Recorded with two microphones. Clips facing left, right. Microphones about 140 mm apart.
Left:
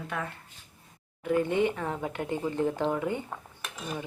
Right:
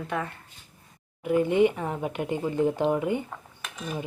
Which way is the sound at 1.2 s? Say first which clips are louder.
Right 4 dB; 10° right (ahead or behind).